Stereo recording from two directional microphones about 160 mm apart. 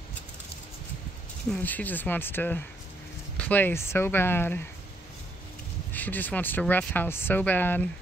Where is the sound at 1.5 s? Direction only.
10° left (ahead or behind).